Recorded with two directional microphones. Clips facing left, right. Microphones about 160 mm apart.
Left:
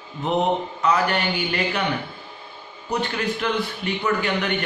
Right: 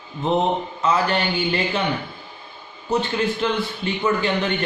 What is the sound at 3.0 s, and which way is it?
A man's voice, 25° right (ahead or behind).